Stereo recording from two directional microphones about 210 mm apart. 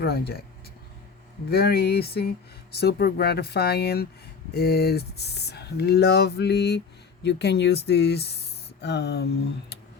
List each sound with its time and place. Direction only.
0.0 s speech: 45° left (ahead or behind)
1.5 s speech: 50° left (ahead or behind)